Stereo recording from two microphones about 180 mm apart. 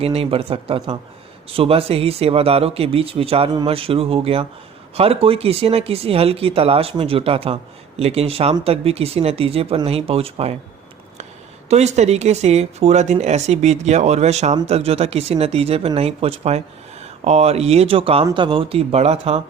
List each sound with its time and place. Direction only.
0.0 s speech: 35° right (ahead or behind)
11.7 s speech: 40° right (ahead or behind)